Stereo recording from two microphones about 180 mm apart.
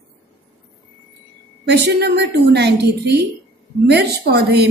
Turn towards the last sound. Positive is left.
turn(degrees=-65)  # may be behind; listen again after turning